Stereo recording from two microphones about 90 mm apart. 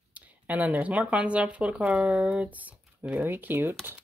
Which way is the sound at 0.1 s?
15° right (ahead or behind).